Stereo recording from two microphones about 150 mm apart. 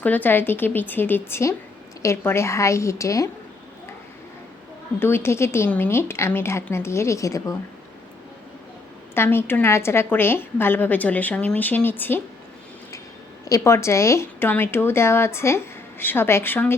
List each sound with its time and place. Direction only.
0.0 s a woman's voice: 10° left (ahead or behind)
4.9 s speech: 15° left (ahead or behind)
9.1 s speech: 15° left (ahead or behind)
13.4 s speech: 20° left (ahead or behind)